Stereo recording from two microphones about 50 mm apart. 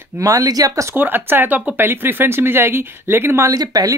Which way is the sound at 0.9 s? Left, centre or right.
Right.